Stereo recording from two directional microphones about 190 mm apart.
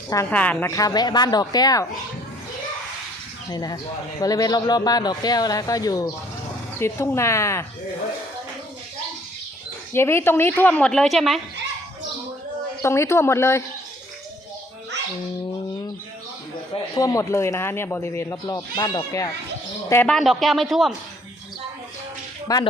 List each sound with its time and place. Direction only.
0.3 s speech: 10° left (ahead or behind)
3.5 s speech: 20° left (ahead or behind)
9.9 s speech: 15° left (ahead or behind)
12.8 s speech: 15° left (ahead or behind)
16.7 s speech: 20° left (ahead or behind)
19.9 s speech: 10° left (ahead or behind)
22.5 s speech: 20° left (ahead or behind)